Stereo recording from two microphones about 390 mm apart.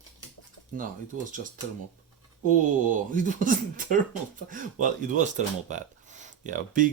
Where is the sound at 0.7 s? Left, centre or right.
Centre.